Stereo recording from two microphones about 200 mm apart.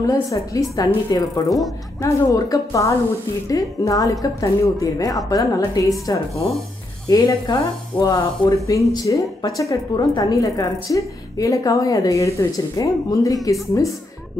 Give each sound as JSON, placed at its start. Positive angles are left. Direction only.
{"t": 0.0, "sound": "a woman's voice", "side_deg": 15}